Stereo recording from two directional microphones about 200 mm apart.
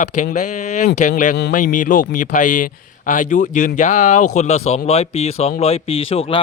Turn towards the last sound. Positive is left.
turn(degrees=30)  # may be behind; listen again after turning